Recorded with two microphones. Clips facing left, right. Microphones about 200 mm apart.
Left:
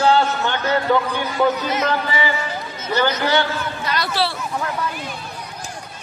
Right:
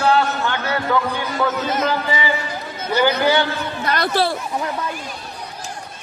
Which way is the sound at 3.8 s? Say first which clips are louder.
Right 4 dB; 55° right (ahead or behind).